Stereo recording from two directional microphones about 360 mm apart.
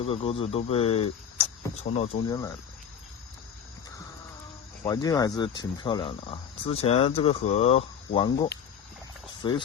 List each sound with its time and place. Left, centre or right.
0.0 s speech: centre
4.8 s speech: centre